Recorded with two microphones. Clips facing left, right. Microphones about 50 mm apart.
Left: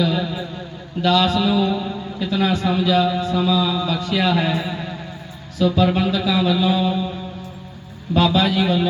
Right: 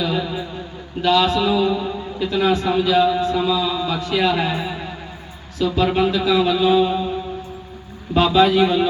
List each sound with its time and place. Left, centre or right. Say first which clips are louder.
0.0 s a man's voice: left 1 dB; centre
8.1 s a man's voice: right 3 dB; centre